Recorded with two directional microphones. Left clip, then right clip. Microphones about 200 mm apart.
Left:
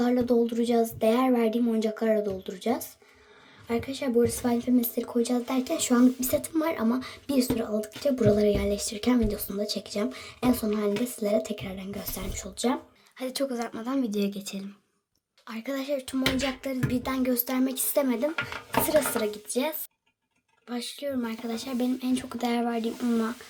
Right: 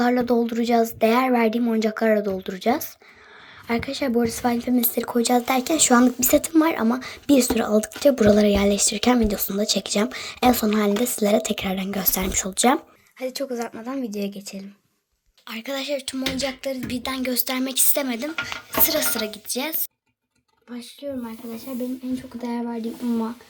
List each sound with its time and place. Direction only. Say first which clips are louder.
0.0 s speech: right 4 dB; 10° right (ahead or behind)
13.1 s speech: right 3 dB; centre (ahead or behind)
21.0 s speech: right 2 dB; 45° left (ahead or behind)
22.0 s speech: left 1 dB; 25° left (ahead or behind)
22.4 s speech: left 1 dB; 15° left (ahead or behind)